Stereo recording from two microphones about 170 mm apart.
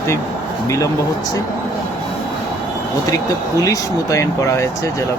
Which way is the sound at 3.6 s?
20° left (ahead or behind).